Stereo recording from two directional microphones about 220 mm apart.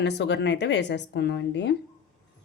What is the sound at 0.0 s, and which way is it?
Speech, 50° left (ahead or behind).